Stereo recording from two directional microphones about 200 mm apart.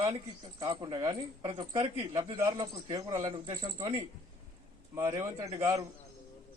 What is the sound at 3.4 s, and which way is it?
Speech, 25° right (ahead or behind).